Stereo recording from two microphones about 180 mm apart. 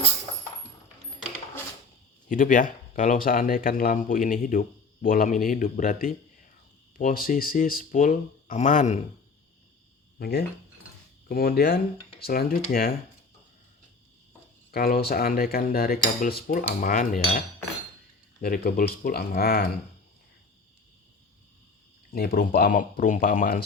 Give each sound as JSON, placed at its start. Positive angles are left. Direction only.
{"t": 2.3, "sound": "speech", "side_deg": 50}
{"t": 10.2, "sound": "speech", "side_deg": 65}
{"t": 14.7, "sound": "speech", "side_deg": 55}
{"t": 18.3, "sound": "speech", "side_deg": 50}
{"t": 22.1, "sound": "speech", "side_deg": 55}